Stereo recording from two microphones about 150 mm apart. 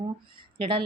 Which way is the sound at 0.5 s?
35° right (ahead or behind).